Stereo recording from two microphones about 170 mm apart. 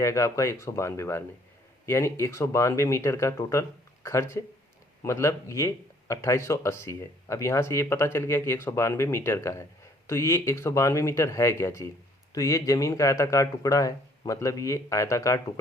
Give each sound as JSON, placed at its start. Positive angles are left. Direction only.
{"t": 0.0, "sound": "speech", "side_deg": 20}